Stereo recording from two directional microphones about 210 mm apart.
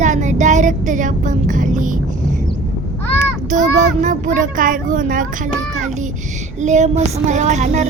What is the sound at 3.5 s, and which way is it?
A child's voice, 35° right (ahead or behind).